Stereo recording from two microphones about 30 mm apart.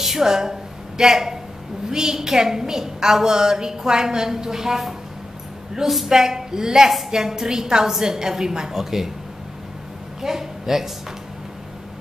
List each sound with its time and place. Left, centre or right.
0.0 s a sound: centre
0.3 s a woman's voice: centre
6.0 s a woman's voice: centre
10.2 s a woman's voice: centre